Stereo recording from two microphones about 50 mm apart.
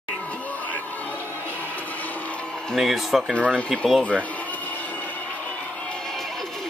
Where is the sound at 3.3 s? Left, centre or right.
Left.